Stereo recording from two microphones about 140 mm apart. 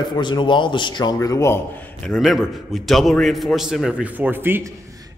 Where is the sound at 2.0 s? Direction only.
Centre (ahead or behind); by 4.6 s 15° right (ahead or behind).